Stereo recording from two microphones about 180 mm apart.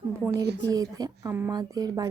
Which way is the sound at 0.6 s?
20° right (ahead or behind).